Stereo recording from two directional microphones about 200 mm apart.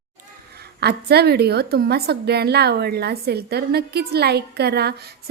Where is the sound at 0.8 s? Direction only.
55° right (ahead or behind).